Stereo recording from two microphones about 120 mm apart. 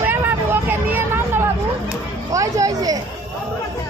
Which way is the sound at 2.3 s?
25° right (ahead or behind).